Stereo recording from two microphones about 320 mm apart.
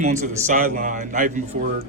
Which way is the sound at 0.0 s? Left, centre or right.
Right.